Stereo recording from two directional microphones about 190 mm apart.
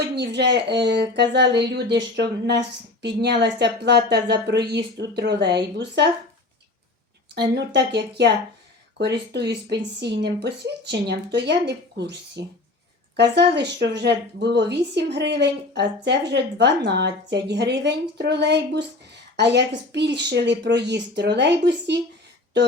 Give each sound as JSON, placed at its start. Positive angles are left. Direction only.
{"t": 0.2, "sound": "speech", "side_deg": -65}
{"t": 7.3, "sound": "speech", "side_deg": -65}